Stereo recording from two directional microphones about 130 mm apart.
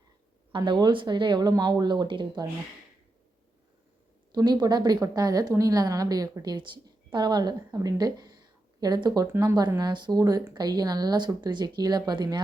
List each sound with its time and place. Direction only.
0.5 s a woman's voice: 35° right (ahead or behind)
4.4 s a woman's voice: 30° right (ahead or behind)